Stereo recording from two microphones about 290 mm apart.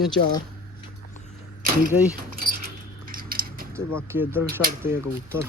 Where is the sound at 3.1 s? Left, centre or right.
Right.